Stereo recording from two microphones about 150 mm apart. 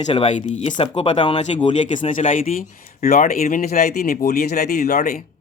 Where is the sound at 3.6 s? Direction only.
90° left.